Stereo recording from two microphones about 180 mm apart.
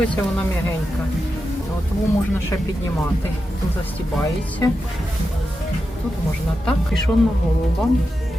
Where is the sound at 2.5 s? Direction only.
15° left (ahead or behind).